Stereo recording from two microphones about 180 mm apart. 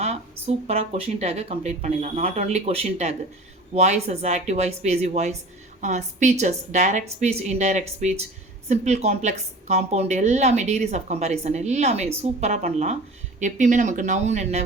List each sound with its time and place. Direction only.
0.0 s speech: 35° right (ahead or behind)